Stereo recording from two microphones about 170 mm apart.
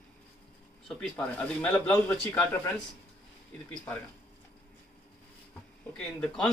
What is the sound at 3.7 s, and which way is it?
Speech, 10° left (ahead or behind).